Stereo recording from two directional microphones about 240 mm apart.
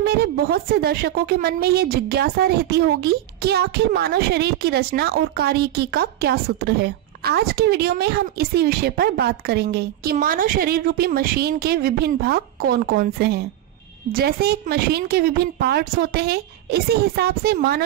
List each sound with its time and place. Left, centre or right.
0.0 s a woman's voice: right